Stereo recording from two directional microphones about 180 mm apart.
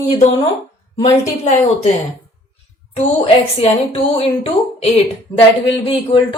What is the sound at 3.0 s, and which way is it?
Speech, 35° left (ahead or behind).